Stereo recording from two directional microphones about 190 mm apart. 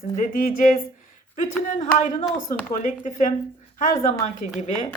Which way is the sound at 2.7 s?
40° left (ahead or behind).